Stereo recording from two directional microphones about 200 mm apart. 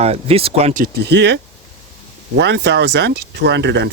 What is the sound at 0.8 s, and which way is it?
Speech, 60° right (ahead or behind).